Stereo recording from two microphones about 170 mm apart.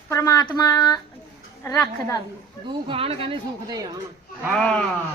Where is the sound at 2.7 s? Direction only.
30° right (ahead or behind).